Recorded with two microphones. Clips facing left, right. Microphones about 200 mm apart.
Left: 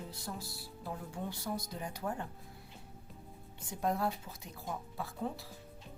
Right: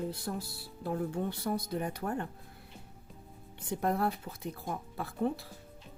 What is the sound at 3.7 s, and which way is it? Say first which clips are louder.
Speech: right 3 dB; 60° right (ahead or behind).